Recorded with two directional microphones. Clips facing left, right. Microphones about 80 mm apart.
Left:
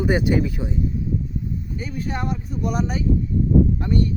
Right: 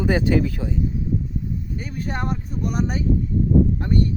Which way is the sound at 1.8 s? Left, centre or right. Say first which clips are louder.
Left 1 dB; right.